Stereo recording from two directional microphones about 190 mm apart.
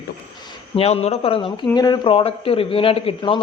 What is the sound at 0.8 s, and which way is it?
Speech, 30° left (ahead or behind).